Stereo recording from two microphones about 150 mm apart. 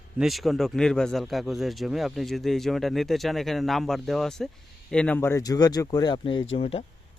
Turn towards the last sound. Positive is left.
turn(degrees=40)  # may be behind; listen again after turning